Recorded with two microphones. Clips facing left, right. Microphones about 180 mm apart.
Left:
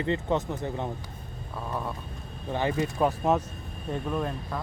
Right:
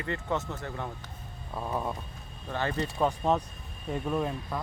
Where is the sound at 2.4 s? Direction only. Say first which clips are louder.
Left 4 dB; 15° left (ahead or behind); by 4.6 s 5° right (ahead or behind).